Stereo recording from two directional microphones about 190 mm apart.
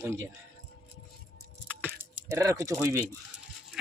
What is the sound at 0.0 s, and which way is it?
Speech, 15° right (ahead or behind).